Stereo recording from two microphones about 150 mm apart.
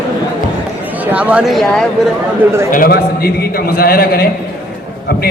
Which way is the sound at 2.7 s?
80° left.